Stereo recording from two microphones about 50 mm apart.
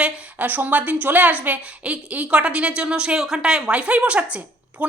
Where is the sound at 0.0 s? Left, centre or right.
Right.